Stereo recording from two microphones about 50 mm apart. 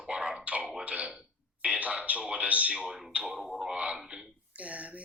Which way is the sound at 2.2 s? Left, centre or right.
Right.